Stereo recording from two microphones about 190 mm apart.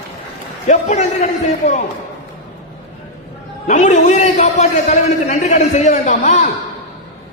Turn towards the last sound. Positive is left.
turn(degrees=40)  # may be behind; listen again after turning